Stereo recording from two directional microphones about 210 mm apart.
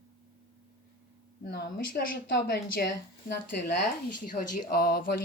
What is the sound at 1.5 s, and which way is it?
Speech, 45° left (ahead or behind).